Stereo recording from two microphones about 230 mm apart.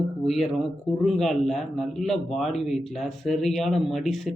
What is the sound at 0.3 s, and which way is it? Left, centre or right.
A man's voice, centre.